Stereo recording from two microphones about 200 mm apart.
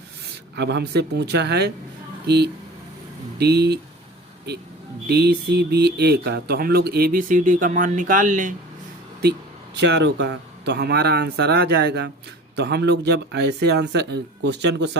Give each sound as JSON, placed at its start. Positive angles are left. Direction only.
{"t": 0.5, "sound": "speech", "side_deg": -60}
{"t": 5.0, "sound": "speech", "side_deg": -55}
{"t": 9.7, "sound": "speech", "side_deg": -60}